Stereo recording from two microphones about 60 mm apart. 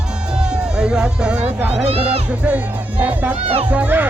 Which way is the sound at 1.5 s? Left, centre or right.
Right.